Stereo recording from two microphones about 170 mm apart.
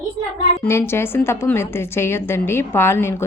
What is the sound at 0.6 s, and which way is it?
A woman's voice, 15° left (ahead or behind).